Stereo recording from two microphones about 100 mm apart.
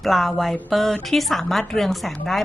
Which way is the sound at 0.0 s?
Centre (ahead or behind).